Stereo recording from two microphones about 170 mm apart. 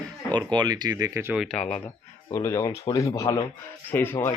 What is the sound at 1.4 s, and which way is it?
Speech, 5° left (ahead or behind).